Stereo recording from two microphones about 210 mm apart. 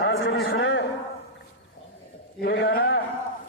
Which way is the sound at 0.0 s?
65° left (ahead or behind).